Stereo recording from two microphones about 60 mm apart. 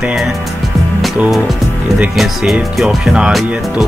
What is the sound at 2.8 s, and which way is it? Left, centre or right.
Speech, centre.